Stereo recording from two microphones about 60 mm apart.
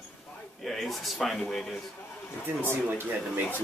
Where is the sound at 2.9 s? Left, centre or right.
Right.